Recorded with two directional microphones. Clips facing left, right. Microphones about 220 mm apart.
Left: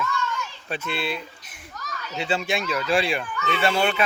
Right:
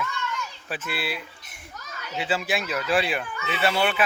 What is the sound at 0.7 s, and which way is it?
Speech, 5° right (ahead or behind).